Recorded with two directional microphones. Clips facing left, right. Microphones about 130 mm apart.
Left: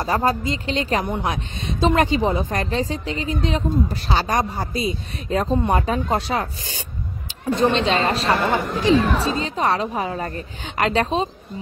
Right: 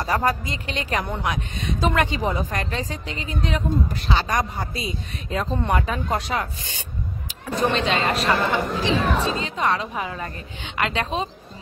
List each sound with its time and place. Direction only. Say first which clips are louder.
0.0 s speech: left 2 dB; 25° left (ahead or behind)